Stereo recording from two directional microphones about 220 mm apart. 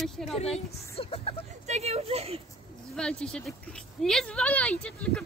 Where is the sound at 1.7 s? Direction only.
30° right (ahead or behind).